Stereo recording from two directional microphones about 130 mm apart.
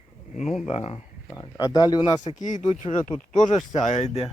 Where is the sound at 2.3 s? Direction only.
75° left (ahead or behind).